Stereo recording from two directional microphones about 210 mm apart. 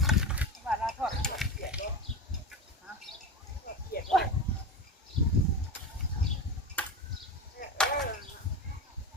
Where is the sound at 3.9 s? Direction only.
45° left (ahead or behind).